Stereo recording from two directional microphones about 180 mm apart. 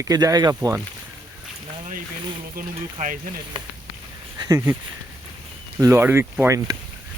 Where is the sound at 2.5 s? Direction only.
45° right (ahead or behind).